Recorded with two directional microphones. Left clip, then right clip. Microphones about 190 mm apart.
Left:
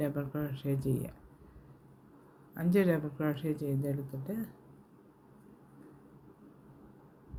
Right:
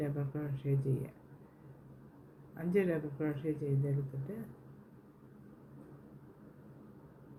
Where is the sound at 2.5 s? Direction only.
55° left (ahead or behind).